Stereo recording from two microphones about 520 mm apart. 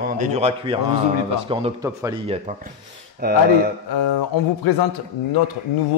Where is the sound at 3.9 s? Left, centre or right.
Left.